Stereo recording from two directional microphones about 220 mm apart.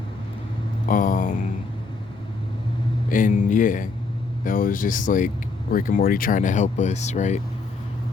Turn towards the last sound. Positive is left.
turn(degrees=30)  # may be behind; listen again after turning